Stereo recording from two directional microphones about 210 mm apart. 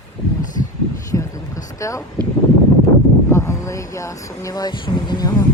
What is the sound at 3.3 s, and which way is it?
Speech, 15° left (ahead or behind).